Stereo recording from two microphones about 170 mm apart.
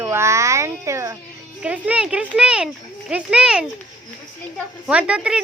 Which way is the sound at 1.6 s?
10° right (ahead or behind).